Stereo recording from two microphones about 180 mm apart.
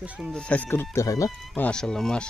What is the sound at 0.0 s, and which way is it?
Speech, centre (ahead or behind).